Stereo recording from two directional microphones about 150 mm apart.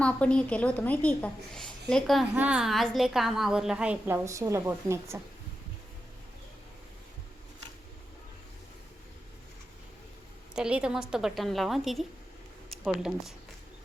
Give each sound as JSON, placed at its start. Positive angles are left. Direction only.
{"t": 0.0, "sound": "a woman's voice", "side_deg": 5}
{"t": 2.3, "sound": "a woman's voice", "side_deg": -10}
{"t": 10.5, "sound": "a woman's voice", "side_deg": -5}